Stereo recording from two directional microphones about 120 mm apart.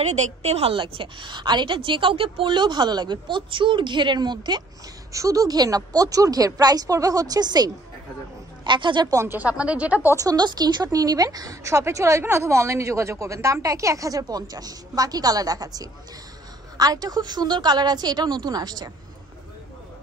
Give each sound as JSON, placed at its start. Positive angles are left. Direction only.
{"t": 0.0, "sound": "a woman's voice", "side_deg": -70}
{"t": 9.2, "sound": "speech", "side_deg": -15}
{"t": 10.1, "sound": "a woman's voice", "side_deg": -35}